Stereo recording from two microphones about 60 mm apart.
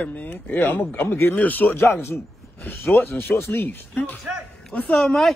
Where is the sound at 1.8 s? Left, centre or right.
Left.